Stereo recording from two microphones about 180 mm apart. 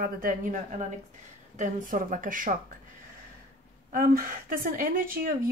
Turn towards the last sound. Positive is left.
turn(degrees=-50)  # may be behind; listen again after turning